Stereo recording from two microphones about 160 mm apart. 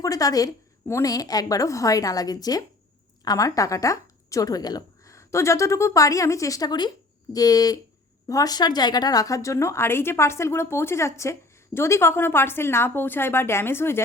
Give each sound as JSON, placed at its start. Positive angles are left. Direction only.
{"t": 0.0, "sound": "a woman's voice", "side_deg": 20}